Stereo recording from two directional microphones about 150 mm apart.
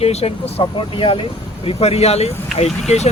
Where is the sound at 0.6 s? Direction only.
35° left (ahead or behind).